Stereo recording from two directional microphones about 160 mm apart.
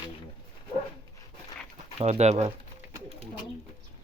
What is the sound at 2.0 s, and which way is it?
Speech, 45° right (ahead or behind).